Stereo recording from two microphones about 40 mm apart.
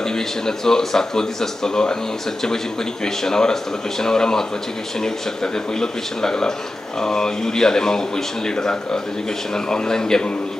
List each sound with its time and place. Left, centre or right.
0.0 s speech: centre